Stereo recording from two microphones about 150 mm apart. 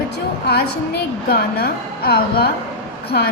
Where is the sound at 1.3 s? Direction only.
90° left.